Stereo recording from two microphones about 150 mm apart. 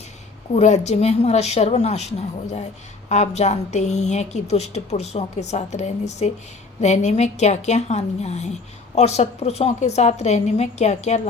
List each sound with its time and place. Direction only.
0.5 s a woman's voice: 50° left (ahead or behind)